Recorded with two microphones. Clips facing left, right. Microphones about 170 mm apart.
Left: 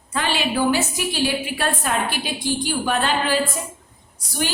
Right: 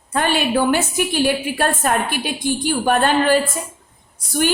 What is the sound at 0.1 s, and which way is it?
A woman's voice, 50° right (ahead or behind).